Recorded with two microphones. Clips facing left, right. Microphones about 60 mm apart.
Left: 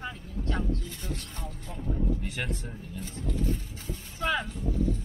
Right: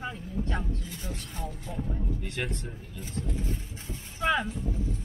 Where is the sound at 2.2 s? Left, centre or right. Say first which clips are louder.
Even; centre.